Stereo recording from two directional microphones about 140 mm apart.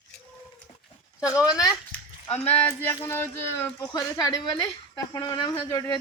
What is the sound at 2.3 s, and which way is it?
Speech, 10° left (ahead or behind).